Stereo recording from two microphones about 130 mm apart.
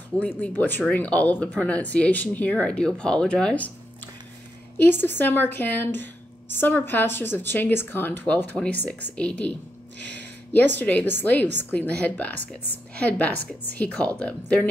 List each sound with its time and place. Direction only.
0.6 s speech: 10° left (ahead or behind)
10.5 s speech: 15° left (ahead or behind)